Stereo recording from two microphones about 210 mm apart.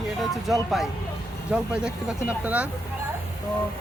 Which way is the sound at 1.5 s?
5° right (ahead or behind).